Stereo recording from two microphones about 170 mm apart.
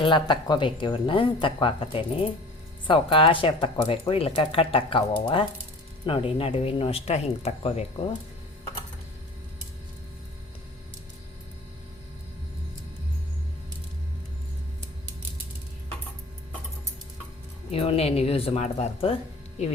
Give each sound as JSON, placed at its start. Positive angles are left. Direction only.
{"t": 0.0, "sound": "speech", "side_deg": 25}
{"t": 17.7, "sound": "speech", "side_deg": 35}